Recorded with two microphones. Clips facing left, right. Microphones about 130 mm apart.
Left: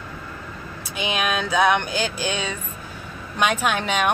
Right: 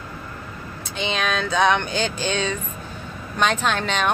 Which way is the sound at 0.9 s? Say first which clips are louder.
Even; 10° left (ahead or behind).